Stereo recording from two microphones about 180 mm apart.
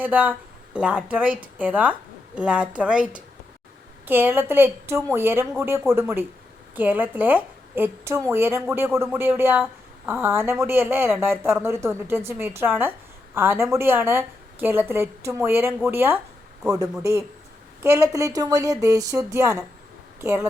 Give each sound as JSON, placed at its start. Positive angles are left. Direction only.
{"t": 0.0, "sound": "a woman's voice", "side_deg": -10}